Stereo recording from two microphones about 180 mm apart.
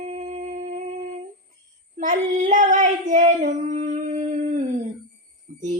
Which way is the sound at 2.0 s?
45° right (ahead or behind).